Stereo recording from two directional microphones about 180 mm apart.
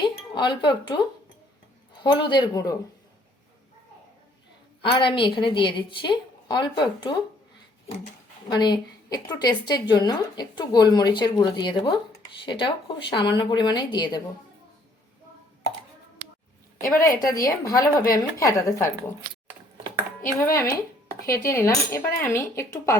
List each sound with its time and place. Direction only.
0.0 s speech: 25° left (ahead or behind)
2.0 s a woman's voice: 25° left (ahead or behind)
4.8 s a woman's voice: 30° left (ahead or behind)
8.4 s a woman's voice: 25° left (ahead or behind)
17.0 s a woman's voice: 20° left (ahead or behind)
20.2 s speech: 15° left (ahead or behind)